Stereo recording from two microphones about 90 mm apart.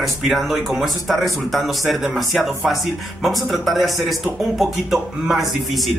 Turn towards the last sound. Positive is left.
turn(degrees=0)  # may be behind; listen again after turning